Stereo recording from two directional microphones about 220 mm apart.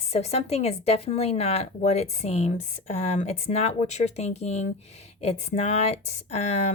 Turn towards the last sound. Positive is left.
turn(degrees=30)  # may be behind; listen again after turning